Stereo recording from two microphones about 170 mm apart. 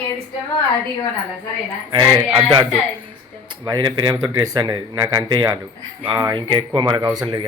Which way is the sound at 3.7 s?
25° right (ahead or behind).